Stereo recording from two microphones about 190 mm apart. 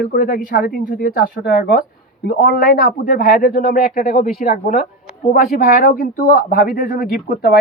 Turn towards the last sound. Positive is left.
turn(degrees=50)  # may be behind; listen again after turning